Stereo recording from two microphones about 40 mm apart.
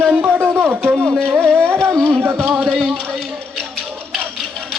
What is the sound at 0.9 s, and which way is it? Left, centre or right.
Music, right.